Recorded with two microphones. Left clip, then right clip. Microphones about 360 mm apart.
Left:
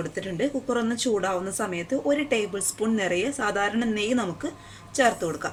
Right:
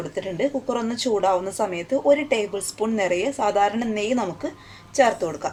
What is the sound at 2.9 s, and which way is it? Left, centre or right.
A woman's voice, centre.